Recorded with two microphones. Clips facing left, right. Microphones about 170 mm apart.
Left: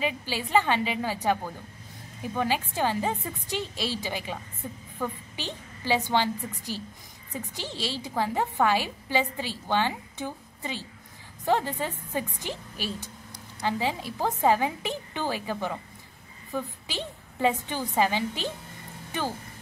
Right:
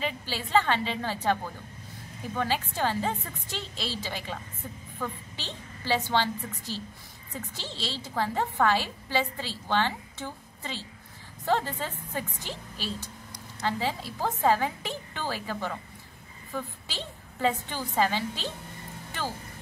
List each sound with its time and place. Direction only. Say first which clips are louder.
0.0 s a woman's voice: left 3 dB; 15° left (ahead or behind)